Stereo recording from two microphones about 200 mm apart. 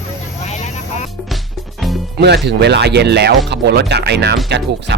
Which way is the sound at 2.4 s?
55° right (ahead or behind).